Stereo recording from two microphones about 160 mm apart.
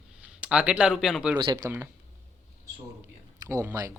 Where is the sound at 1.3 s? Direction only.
25° right (ahead or behind).